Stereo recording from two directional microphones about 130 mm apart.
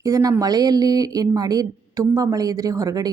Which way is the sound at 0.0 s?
25° right (ahead or behind).